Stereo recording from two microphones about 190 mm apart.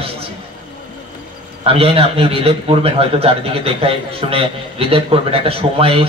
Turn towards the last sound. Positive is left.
turn(degrees=-30)  # may be behind; listen again after turning